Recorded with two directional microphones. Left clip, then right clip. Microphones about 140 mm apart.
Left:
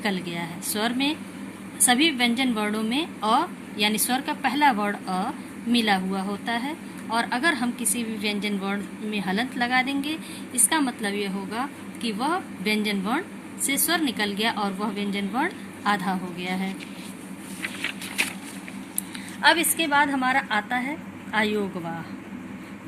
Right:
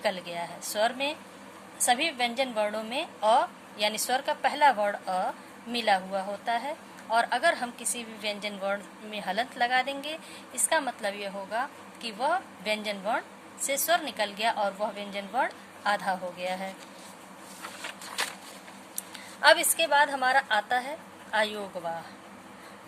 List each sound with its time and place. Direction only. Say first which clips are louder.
0.0 s speech: left 2 dB; 35° right (ahead or behind)
19.4 s speech: left 1 dB; 45° right (ahead or behind)